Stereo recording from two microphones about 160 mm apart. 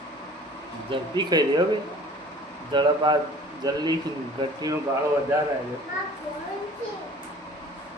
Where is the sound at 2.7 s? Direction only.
30° right (ahead or behind).